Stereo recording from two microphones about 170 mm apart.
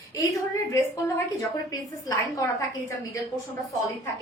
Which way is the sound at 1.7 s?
20° left (ahead or behind).